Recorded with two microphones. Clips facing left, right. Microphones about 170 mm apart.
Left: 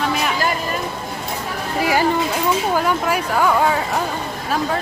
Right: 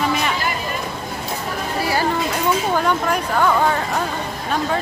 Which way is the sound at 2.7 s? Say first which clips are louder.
Even; 5° left (ahead or behind).